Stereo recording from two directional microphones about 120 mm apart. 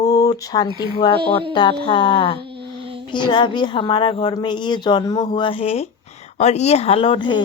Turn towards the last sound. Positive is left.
turn(degrees=40)  # may be behind; listen again after turning